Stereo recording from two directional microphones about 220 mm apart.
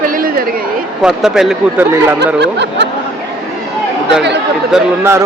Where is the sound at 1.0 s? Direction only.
Centre (ahead or behind).